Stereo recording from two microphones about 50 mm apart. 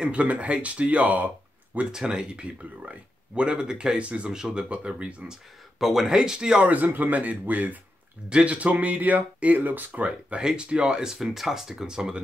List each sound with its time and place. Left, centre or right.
0.0 s speech: right
1.9 s speech: centre
4.3 s speech: centre
5.8 s speech: centre
6.7 s speech: right
10.3 s speech: centre
11.2 s speech: centre